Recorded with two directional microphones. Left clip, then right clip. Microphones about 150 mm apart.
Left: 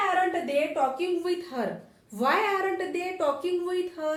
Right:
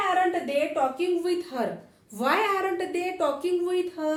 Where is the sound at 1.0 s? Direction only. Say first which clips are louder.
Right 2 dB; 20° right (ahead or behind).